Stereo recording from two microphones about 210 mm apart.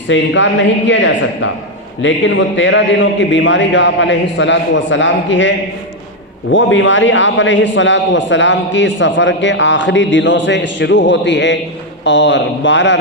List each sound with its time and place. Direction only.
0.1 s a man's voice: 60° left (ahead or behind)